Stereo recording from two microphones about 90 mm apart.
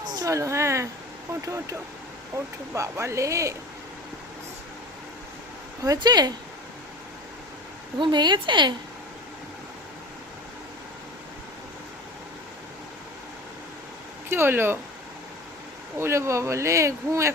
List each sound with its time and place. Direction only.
0.1 s speech: 40° right (ahead or behind)
2.7 s speech: 35° right (ahead or behind)
6.0 s speech: 50° right (ahead or behind)
7.9 s a woman's voice: 60° right (ahead or behind)
14.3 s speech: 25° right (ahead or behind)
16.0 s speech: 30° right (ahead or behind)